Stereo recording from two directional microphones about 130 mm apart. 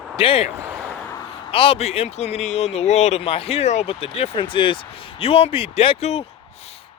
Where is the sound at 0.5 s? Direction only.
15° right (ahead or behind).